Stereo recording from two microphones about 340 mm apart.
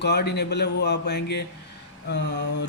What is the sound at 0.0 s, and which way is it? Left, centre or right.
Speech, left.